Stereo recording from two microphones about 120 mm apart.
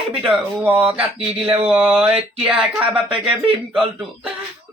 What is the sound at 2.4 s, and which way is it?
Speech, 10° right (ahead or behind).